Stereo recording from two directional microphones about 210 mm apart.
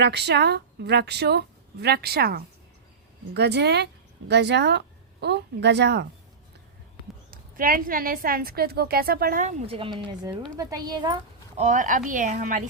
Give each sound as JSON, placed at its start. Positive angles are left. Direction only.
{"t": 0.0, "sound": "a woman's voice", "side_deg": -55}
{"t": 7.3, "sound": "a woman's voice", "side_deg": -40}
{"t": 11.5, "sound": "speech", "side_deg": -35}